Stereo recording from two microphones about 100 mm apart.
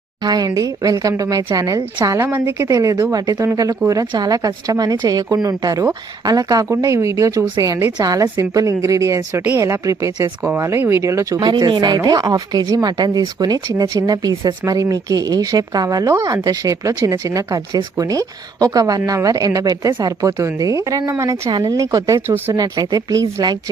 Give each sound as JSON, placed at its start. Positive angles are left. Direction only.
{"t": 0.2, "sound": "speech", "side_deg": -45}
{"t": 2.6, "sound": "speech", "side_deg": -35}
{"t": 11.3, "sound": "speech", "side_deg": -50}
{"t": 21.5, "sound": "speech", "side_deg": -40}